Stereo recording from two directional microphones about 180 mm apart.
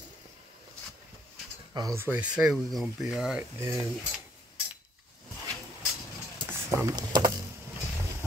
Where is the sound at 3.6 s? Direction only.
15° right (ahead or behind).